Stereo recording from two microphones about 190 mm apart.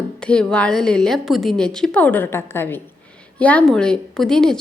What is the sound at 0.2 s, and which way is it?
A woman's voice, 5° left (ahead or behind).